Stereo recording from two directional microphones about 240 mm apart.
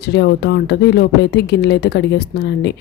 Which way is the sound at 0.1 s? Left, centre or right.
Left.